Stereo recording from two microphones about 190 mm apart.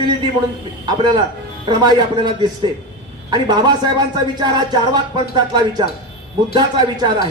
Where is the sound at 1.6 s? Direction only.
20° right (ahead or behind).